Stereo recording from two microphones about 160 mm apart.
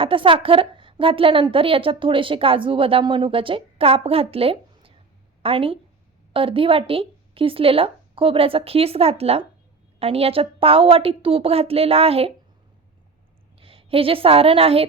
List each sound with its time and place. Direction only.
0.0 s a woman's voice: 35° right (ahead or behind)
13.6 s a woman's voice: 35° right (ahead or behind)